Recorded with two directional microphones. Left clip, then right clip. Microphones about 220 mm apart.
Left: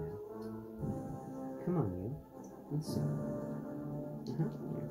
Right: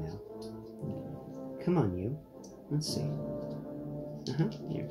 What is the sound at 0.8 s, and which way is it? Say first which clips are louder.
Music: right 1 dB; 35° left (ahead or behind).